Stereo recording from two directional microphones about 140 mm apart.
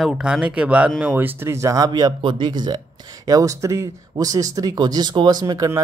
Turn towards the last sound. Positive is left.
turn(degrees=-25)  # may be behind; listen again after turning